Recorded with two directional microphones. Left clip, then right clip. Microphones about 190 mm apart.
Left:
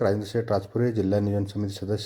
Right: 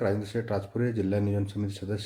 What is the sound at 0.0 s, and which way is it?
A man's voice, 25° left (ahead or behind).